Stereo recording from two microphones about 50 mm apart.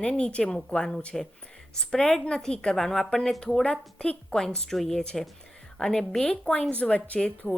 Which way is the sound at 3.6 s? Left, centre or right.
Centre.